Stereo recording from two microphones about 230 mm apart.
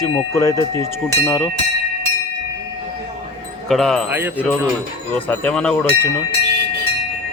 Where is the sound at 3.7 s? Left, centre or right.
Centre.